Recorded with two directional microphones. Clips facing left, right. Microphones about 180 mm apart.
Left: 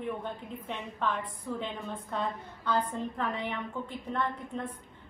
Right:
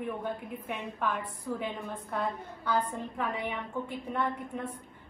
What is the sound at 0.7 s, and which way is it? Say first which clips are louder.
A woman's voice: even; 10° right (ahead or behind).